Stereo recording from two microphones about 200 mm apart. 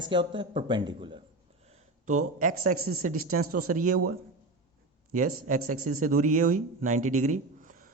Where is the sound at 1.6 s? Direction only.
35° right (ahead or behind).